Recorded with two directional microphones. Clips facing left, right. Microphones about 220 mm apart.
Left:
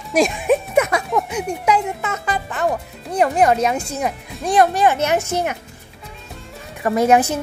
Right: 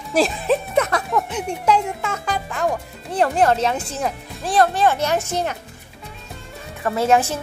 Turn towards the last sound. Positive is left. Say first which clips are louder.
# left 3 dB
turn(degrees=15)  # may be behind; listen again after turning